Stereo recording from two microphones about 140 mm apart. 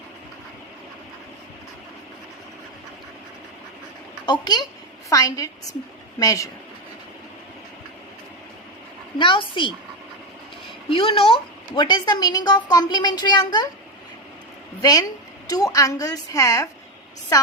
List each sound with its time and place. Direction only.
4.3 s a woman's voice: 30° left (ahead or behind)
9.1 s a woman's voice: 35° left (ahead or behind)
10.8 s a woman's voice: 40° left (ahead or behind)
14.8 s a woman's voice: 25° left (ahead or behind)